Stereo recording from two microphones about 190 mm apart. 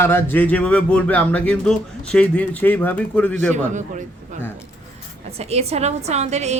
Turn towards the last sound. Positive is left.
turn(degrees=-35)  # may be behind; listen again after turning